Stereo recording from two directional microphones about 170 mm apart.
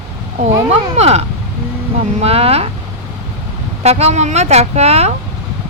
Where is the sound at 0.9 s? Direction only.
40° right (ahead or behind).